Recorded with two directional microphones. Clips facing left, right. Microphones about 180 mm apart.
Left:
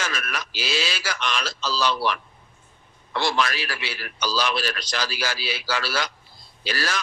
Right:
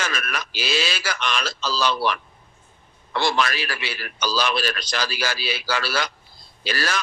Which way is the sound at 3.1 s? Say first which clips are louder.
Right 1 dB; 60° right (ahead or behind).